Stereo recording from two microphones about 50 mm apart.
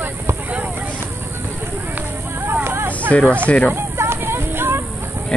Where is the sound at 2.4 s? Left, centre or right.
Right.